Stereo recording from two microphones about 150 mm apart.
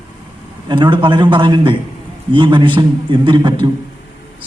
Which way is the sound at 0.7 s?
30° right (ahead or behind).